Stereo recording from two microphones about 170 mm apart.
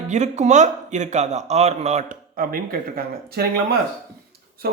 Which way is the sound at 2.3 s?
55° right (ahead or behind).